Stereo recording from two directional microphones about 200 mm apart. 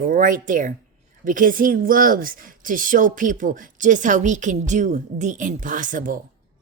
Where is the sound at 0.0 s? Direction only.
40° right (ahead or behind).